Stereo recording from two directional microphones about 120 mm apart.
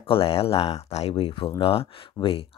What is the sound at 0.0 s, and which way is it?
Speech, 50° left (ahead or behind).